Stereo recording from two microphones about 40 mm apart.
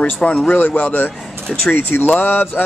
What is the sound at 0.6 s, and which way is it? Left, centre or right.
Speech, left.